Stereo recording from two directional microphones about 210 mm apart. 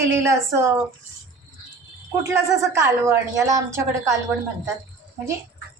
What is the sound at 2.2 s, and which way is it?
A woman's voice, 15° right (ahead or behind).